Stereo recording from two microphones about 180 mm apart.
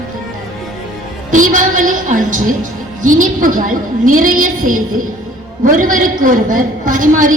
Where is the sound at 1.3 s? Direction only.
45° right (ahead or behind).